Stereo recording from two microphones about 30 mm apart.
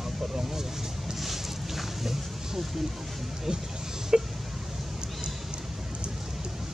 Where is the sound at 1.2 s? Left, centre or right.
Centre.